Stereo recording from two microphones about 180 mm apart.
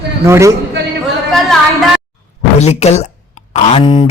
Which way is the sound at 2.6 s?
35° left (ahead or behind).